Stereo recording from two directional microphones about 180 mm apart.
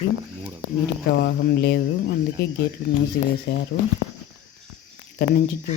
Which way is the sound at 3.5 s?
75° left (ahead or behind).